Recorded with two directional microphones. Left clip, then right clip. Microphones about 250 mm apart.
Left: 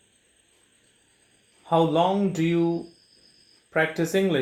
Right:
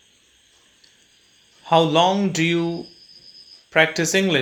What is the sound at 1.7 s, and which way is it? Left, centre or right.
Speech, right.